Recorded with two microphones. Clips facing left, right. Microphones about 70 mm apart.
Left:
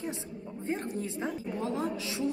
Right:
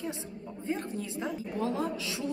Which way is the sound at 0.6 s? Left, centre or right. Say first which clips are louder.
Left 1 dB; left.